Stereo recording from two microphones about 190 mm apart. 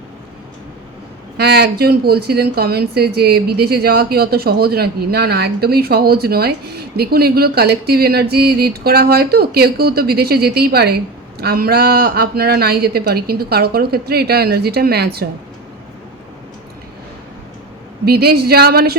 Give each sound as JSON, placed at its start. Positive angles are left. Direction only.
{"t": 1.4, "sound": "speech", "side_deg": -60}
{"t": 18.0, "sound": "speech", "side_deg": -55}